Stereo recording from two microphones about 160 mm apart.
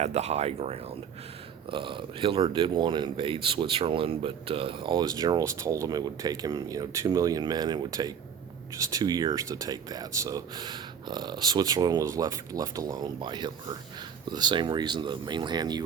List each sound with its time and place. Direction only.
0.0 s speech: 45° right (ahead or behind); by 15.8 s 25° right (ahead or behind)